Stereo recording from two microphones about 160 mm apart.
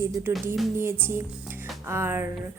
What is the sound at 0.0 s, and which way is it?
A woman's voice, 15° right (ahead or behind).